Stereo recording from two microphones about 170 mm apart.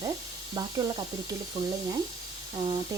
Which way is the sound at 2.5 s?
25° right (ahead or behind).